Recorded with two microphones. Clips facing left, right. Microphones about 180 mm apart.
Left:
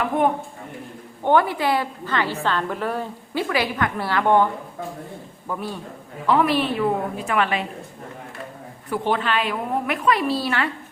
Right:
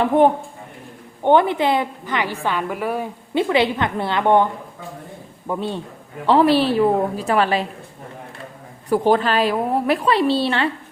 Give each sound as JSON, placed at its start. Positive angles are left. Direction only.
{"t": 1.2, "sound": "a woman's voice", "side_deg": -20}
{"t": 3.3, "sound": "a woman's voice", "side_deg": -25}
{"t": 5.5, "sound": "a woman's voice", "side_deg": -25}
{"t": 8.9, "sound": "a woman's voice", "side_deg": -40}